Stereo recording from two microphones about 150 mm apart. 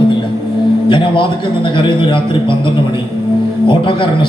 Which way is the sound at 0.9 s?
35° left (ahead or behind).